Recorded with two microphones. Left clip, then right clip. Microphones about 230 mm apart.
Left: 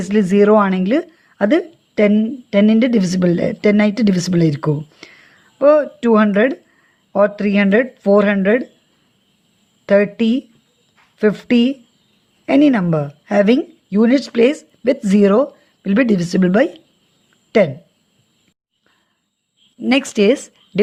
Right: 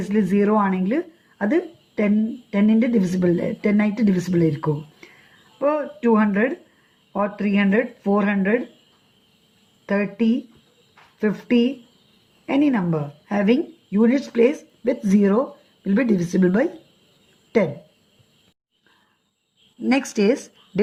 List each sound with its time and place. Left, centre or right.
0.0 s a woman's voice: left
9.8 s a woman's voice: left
19.8 s speech: left